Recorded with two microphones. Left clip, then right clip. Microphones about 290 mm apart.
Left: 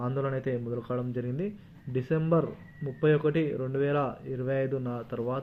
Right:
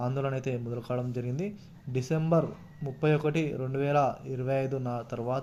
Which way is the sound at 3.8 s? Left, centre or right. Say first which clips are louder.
Right 6 dB; right.